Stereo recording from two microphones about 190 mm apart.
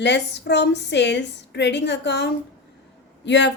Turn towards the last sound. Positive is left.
turn(degrees=70)  # may be behind; listen again after turning